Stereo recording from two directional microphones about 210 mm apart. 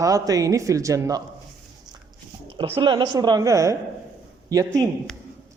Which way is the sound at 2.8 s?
20° right (ahead or behind).